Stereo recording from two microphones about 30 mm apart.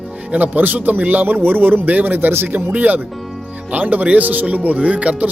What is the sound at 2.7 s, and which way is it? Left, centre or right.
Speech, right.